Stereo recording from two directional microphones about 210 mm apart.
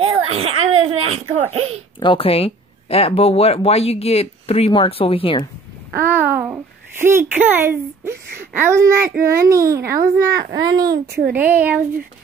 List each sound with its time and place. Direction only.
0.0 s a child's voice: 30° right (ahead or behind)
2.0 s speech: 25° left (ahead or behind)
5.9 s a child's voice: 10° right (ahead or behind)
11.1 s speech: 50° right (ahead or behind)
11.3 s a child's voice: 10° right (ahead or behind)